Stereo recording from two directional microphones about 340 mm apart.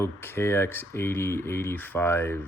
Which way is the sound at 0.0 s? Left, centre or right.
Centre.